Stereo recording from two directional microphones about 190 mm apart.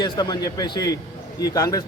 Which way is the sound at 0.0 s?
20° left (ahead or behind).